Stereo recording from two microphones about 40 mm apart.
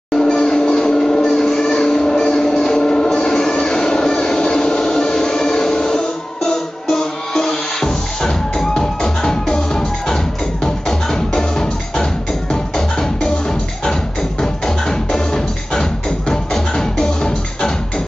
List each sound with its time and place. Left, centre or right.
0.2 s music: centre
14.4 s music: centre